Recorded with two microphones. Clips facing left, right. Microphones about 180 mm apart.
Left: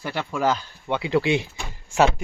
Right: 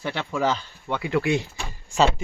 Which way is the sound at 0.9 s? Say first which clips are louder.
Left 2 dB; 25° left (ahead or behind).